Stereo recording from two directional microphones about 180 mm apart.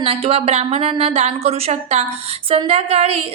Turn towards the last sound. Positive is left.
turn(degrees=-35)  # may be behind; listen again after turning